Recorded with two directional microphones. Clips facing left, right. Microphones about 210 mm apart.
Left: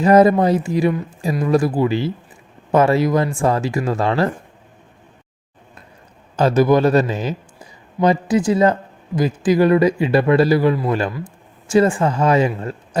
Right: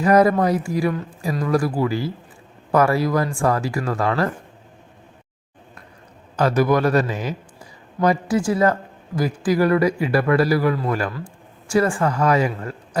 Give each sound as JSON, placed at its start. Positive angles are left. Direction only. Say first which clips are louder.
{"t": 0.0, "sound": "speech", "louder": "left 3 dB", "side_deg": 25}
{"t": 6.3, "sound": "a man's voice", "louder": "left 4 dB", "side_deg": 25}